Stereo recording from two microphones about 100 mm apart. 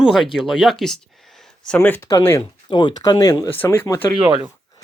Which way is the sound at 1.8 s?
20° left (ahead or behind).